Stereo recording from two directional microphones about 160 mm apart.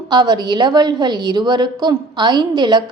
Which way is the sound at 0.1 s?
25° right (ahead or behind).